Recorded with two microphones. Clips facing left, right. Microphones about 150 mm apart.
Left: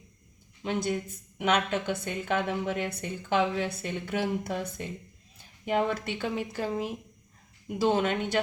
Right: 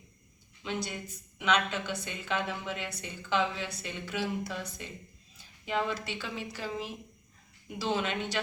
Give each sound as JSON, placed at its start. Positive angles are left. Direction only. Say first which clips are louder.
{"t": 0.6, "sound": "a woman's voice", "louder": "left 7 dB", "side_deg": 50}